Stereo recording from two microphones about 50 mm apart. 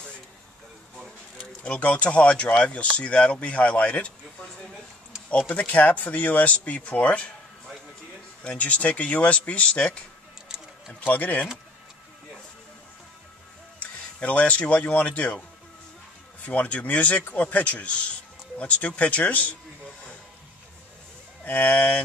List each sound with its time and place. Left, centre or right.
0.9 s a sound: centre
1.6 s speech: left
5.5 s speech: left
8.5 s speech: left
11.1 s speech: left
13.7 s speech: left
16.4 s speech: left
21.5 s speech: left
21.7 s mantra: centre